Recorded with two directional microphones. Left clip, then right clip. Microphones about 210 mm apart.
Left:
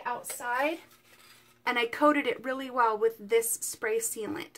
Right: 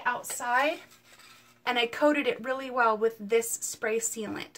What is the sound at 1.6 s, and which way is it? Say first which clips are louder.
Speech: even; 25° left (ahead or behind).